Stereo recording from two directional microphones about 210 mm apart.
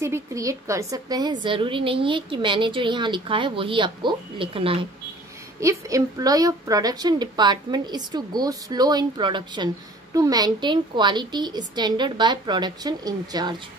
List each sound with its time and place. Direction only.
0.0 s a woman's voice: 15° right (ahead or behind)
5.6 s a woman's voice: 15° right (ahead or behind)